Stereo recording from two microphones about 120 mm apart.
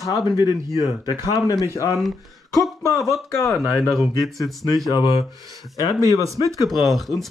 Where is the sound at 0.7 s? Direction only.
35° left (ahead or behind).